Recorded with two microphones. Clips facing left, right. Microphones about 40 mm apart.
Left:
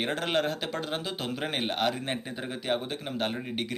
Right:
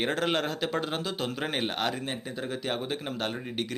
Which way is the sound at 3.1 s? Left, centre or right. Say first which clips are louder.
Left 1 dB; centre.